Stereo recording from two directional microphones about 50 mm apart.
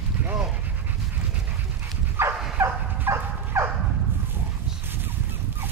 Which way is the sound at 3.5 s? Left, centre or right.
Right.